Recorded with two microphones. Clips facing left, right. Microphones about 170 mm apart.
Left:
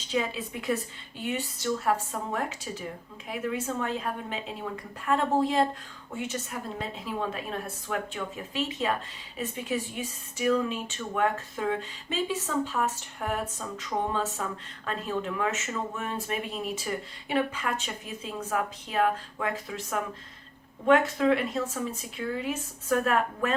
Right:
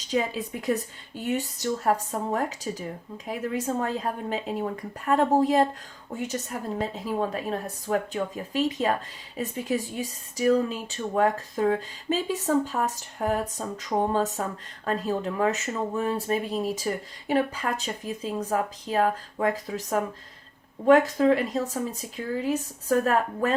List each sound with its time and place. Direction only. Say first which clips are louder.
0.1 s speech: right 3 dB; 40° right (ahead or behind)